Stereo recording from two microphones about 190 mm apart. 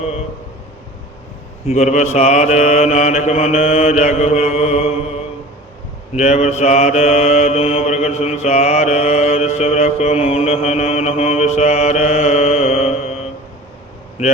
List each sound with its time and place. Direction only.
1.6 s mantra: 35° left (ahead or behind)